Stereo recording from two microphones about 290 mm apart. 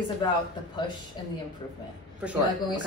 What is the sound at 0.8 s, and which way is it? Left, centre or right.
Speech, centre.